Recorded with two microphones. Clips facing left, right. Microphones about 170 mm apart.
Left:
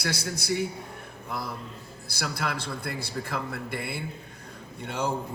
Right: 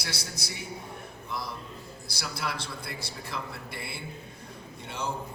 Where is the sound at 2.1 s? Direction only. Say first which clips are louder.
Left 4 dB; 55° left (ahead or behind).